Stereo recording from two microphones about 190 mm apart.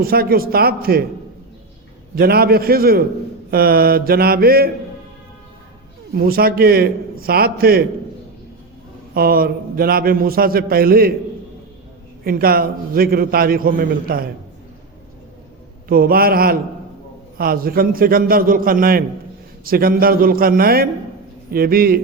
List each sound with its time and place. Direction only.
0.0 s a man's voice: 50° right (ahead or behind)
2.1 s a man's voice: 55° right (ahead or behind)
6.1 s a man's voice: 50° right (ahead or behind)
9.1 s a man's voice: 50° right (ahead or behind)
12.2 s a man's voice: 50° right (ahead or behind)
15.9 s a man's voice: 50° right (ahead or behind)